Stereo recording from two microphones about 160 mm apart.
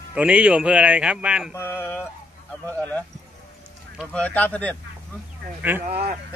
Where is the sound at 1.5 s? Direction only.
15° left (ahead or behind).